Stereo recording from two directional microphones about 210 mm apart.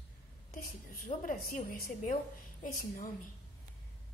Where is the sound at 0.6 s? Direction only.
40° left (ahead or behind).